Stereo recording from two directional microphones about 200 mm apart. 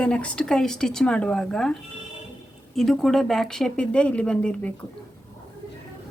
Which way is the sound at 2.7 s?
Centre (ahead or behind).